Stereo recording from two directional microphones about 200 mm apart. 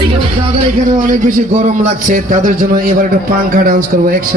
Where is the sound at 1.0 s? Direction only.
45° right (ahead or behind).